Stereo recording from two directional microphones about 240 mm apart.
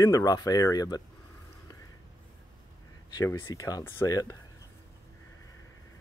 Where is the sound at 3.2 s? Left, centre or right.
Centre.